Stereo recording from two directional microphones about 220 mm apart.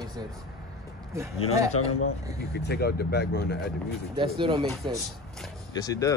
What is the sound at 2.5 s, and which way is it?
Speech, 45° left (ahead or behind).